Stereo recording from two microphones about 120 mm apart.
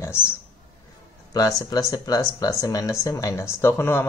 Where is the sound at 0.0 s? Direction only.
20° left (ahead or behind).